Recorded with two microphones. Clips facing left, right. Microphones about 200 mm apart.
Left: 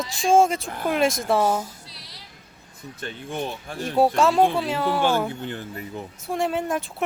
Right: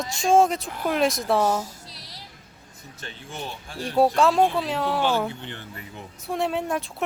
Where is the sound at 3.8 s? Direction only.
Centre (ahead or behind).